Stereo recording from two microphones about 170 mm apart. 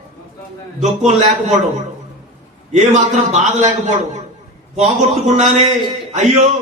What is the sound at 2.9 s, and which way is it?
Speech, 45° right (ahead or behind).